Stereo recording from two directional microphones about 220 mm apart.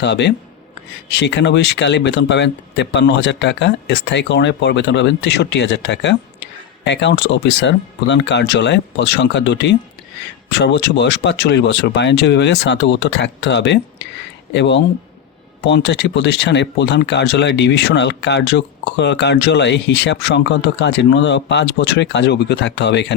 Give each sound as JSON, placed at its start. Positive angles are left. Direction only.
{"t": 0.0, "sound": "speech", "side_deg": 50}